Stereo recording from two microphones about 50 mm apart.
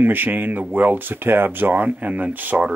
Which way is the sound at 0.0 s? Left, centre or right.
Right.